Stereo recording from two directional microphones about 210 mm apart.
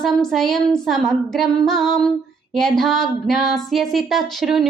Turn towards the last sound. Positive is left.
turn(degrees=0)  # may be behind; listen again after turning